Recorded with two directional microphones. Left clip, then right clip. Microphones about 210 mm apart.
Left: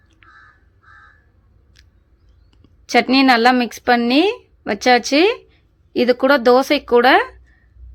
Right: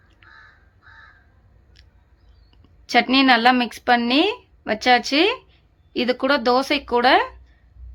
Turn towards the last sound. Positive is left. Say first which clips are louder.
# left 4 dB
turn(degrees=20)  # may be behind; listen again after turning